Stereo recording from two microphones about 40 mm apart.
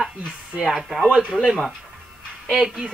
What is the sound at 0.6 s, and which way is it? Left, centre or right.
Speech, centre.